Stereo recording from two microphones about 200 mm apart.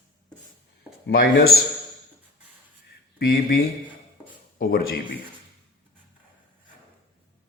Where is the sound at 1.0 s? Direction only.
45° left (ahead or behind).